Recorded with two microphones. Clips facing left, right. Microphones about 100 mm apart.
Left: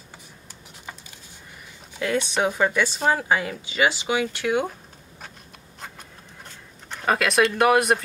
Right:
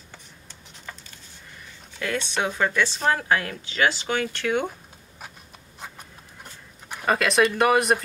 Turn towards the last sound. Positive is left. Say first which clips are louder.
# left 1 dB
turn(degrees=0)  # may be behind; listen again after turning